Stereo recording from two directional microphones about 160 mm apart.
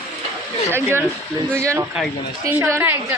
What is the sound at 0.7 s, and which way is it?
A woman's voice, 15° right (ahead or behind).